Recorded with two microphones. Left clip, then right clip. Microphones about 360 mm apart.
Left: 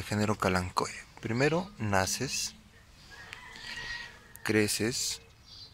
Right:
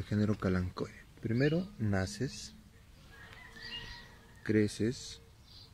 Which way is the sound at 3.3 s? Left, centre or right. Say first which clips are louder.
Left 8 dB; centre.